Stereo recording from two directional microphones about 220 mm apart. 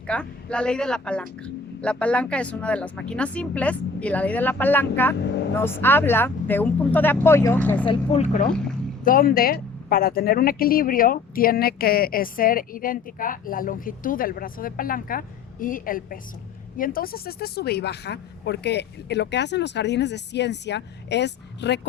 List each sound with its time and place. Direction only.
0.1 s speech: 5° left (ahead or behind)
7.9 s speech: 30° left (ahead or behind); by 21.8 s 50° left (ahead or behind)